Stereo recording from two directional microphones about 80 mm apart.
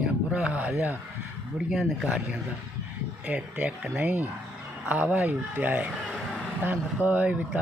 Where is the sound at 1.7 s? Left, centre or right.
Centre.